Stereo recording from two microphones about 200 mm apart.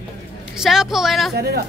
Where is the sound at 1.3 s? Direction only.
55° right (ahead or behind).